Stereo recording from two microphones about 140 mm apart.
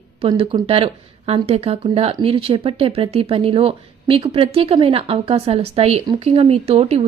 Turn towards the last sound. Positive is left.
turn(degrees=-45)  # may be behind; listen again after turning